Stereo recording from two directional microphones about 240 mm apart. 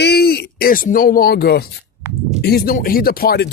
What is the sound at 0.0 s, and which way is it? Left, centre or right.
Speech, left.